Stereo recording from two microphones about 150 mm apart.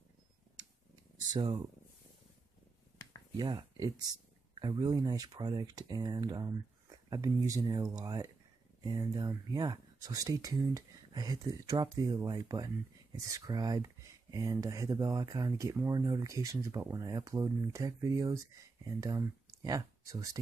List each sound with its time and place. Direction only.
1.3 s speech: 30° right (ahead or behind)
3.3 s speech: 25° right (ahead or behind)